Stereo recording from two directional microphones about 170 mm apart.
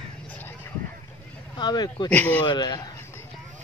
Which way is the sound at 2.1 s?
10° left (ahead or behind).